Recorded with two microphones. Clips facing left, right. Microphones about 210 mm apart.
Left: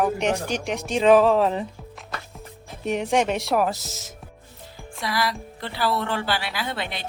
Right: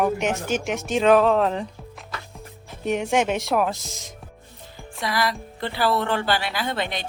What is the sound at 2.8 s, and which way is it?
Speech, centre (ahead or behind).